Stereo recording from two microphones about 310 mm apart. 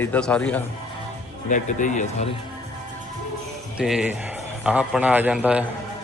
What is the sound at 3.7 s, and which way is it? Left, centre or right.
A man's voice, centre.